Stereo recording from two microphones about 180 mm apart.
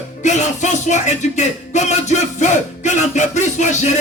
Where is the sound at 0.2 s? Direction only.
40° left (ahead or behind).